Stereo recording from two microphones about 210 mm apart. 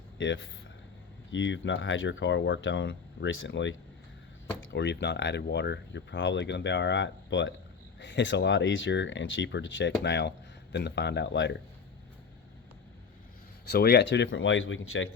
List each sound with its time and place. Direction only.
0.2 s speech: 60° left (ahead or behind)
13.7 s speech: 50° left (ahead or behind); by 15.1 s 65° left (ahead or behind)